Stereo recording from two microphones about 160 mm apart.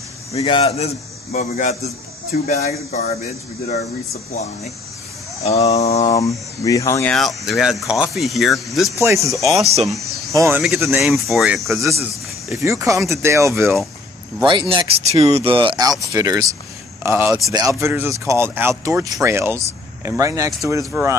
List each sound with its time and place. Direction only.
0.3 s a man's voice: 35° left (ahead or behind)
5.7 s speech: 45° left (ahead or behind)
6.0 s speech: 20° left (ahead or behind)
7.1 s speech: centre (ahead or behind)
9.0 s speech: 20° right (ahead or behind)
9.6 s speech: 40° right (ahead or behind)
10.3 s speech: 20° right (ahead or behind)
10.6 s speech: centre (ahead or behind)
12.5 s speech: 20° right (ahead or behind)
14.4 s speech: 30° right (ahead or behind); by 21.2 s 15° right (ahead or behind)